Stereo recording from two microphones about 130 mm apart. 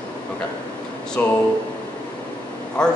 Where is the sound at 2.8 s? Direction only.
5° left (ahead or behind).